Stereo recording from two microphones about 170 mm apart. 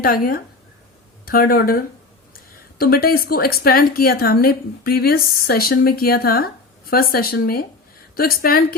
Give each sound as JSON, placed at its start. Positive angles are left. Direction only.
{"t": 0.0, "sound": "a woman's voice", "side_deg": 60}